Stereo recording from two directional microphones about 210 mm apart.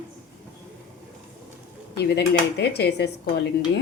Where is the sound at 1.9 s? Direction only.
50° left (ahead or behind).